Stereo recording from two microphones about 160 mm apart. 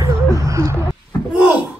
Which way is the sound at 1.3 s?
5° right (ahead or behind).